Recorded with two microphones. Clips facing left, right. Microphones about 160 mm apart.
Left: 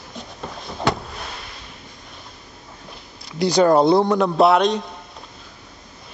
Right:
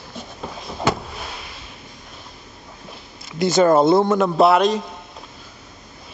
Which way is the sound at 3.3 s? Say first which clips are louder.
Even; centre (ahead or behind).